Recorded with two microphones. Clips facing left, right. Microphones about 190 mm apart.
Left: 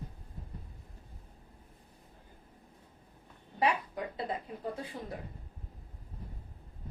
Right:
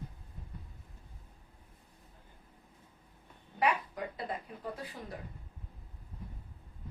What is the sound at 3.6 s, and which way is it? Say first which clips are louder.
A woman's voice: left 1 dB; 25° left (ahead or behind).